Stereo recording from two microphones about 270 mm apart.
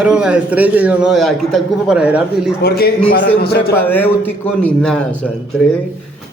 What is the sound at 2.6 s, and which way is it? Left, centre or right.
A man's voice, left.